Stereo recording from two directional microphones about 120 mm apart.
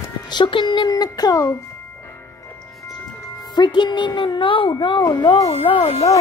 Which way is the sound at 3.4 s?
35° left (ahead or behind).